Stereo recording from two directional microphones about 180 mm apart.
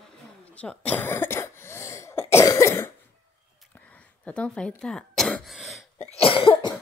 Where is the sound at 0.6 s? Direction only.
5° left (ahead or behind).